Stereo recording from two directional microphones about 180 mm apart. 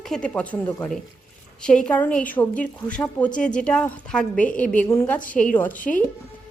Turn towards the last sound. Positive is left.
turn(degrees=50)  # may be behind; listen again after turning